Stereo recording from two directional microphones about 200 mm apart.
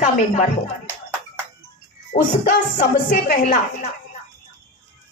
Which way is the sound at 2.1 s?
40° left (ahead or behind).